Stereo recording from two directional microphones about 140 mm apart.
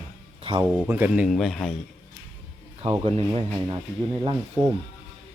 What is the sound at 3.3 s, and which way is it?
Speech, 35° right (ahead or behind).